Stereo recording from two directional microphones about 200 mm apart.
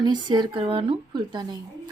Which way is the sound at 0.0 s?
20° right (ahead or behind).